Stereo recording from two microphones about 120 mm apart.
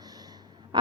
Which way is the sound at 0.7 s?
40° right (ahead or behind).